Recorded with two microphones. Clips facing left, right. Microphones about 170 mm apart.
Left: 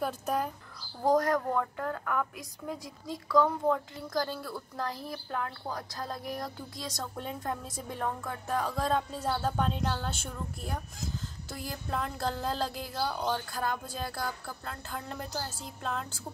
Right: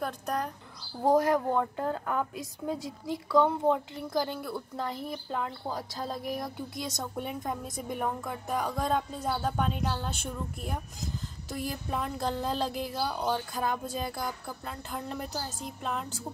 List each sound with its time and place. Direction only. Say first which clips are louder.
0.0 s speech: left 1 dB; 5° left (ahead or behind)
1.0 s a woman's voice: right 2 dB; 25° right (ahead or behind)
7.4 s speech: right 1 dB; centre (ahead or behind)
8.0 s speech: even; 15° right (ahead or behind)
8.7 s speech: even; centre (ahead or behind)
11.9 s speech: even; 10° right (ahead or behind)
12.9 s speech: left 1 dB; 5° right (ahead or behind)
14.6 s speech: right 2 dB; 5° right (ahead or behind)